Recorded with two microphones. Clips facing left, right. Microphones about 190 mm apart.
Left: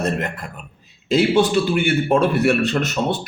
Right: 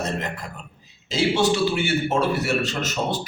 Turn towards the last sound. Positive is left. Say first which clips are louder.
# left 5 dB
turn(degrees=60)  # may be behind; listen again after turning